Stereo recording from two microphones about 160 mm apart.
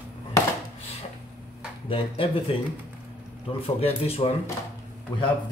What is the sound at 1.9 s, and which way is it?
Speech, 35° left (ahead or behind).